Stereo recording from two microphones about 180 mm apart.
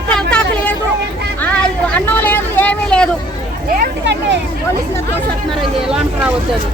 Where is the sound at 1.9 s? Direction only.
10° left (ahead or behind).